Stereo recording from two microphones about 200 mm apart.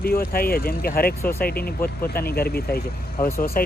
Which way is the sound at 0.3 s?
50° left (ahead or behind).